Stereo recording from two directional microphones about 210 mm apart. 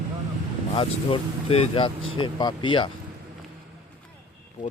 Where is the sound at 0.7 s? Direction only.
25° left (ahead or behind).